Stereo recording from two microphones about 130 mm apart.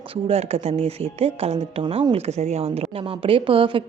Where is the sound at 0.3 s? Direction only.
50° right (ahead or behind).